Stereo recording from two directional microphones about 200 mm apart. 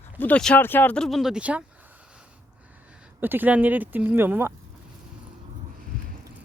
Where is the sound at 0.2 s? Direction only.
5° left (ahead or behind); by 4.5 s 10° right (ahead or behind).